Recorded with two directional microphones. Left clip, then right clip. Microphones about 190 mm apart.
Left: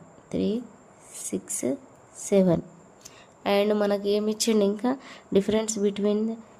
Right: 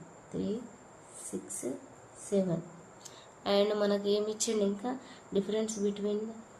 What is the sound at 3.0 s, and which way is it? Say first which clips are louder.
Speech: left 7 dB; 55° left (ahead or behind).